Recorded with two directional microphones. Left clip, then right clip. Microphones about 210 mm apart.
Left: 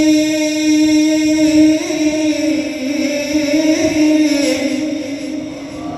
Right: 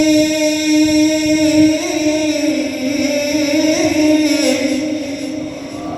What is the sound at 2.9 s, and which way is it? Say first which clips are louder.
Music: right 1 dB; 30° right (ahead or behind).